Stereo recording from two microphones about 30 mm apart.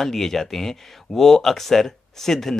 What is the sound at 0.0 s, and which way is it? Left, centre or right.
Speech, centre.